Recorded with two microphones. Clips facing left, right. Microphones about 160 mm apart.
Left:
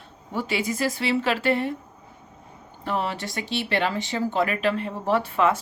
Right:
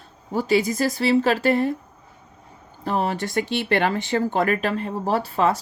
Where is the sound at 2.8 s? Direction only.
40° right (ahead or behind).